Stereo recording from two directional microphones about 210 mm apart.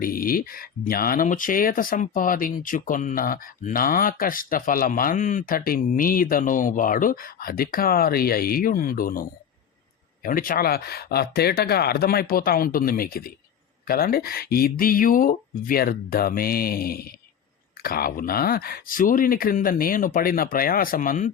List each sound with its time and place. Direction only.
0.0 s speech: 45° left (ahead or behind)
10.2 s speech: 40° left (ahead or behind)